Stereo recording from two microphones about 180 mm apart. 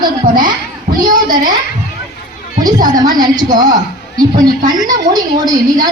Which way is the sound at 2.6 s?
20° right (ahead or behind).